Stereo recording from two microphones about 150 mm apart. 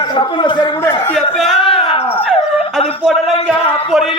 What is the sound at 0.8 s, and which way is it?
Speech, 15° left (ahead or behind).